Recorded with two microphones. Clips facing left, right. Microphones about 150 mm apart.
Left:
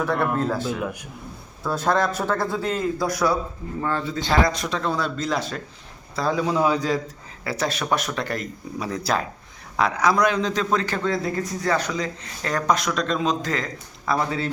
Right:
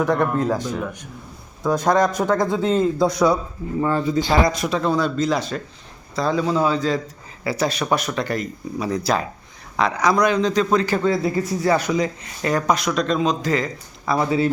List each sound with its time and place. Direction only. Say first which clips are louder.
0.3 s speech: right 3 dB; 15° right (ahead or behind)
0.7 s a man's voice: even; 5° left (ahead or behind)
1.6 s a man's voice: right 4 dB; 15° right (ahead or behind); by 7.0 s 10° left (ahead or behind)
7.4 s a man's voice: right 4 dB; centre (ahead or behind)